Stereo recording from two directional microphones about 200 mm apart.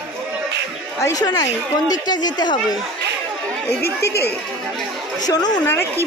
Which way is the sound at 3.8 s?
50° left (ahead or behind).